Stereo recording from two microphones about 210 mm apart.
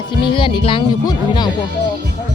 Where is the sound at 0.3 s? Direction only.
25° left (ahead or behind).